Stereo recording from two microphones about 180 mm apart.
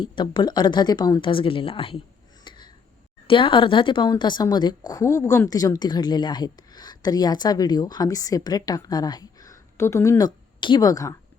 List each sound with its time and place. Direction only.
0.0 s a woman's voice: 25° left (ahead or behind)
2.4 s a sound: 25° left (ahead or behind)
3.2 s a woman's voice: 30° left (ahead or behind)